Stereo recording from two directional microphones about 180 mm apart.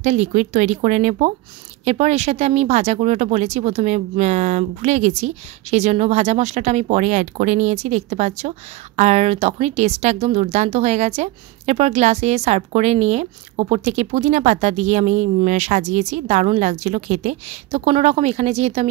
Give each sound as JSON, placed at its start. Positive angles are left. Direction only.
{"t": 0.0, "sound": "speech", "side_deg": -40}